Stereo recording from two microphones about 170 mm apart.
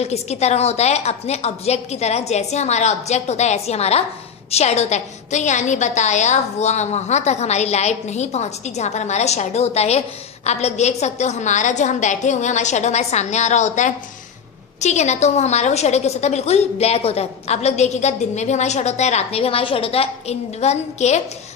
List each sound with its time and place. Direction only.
0.0 s a woman's voice: 40° left (ahead or behind)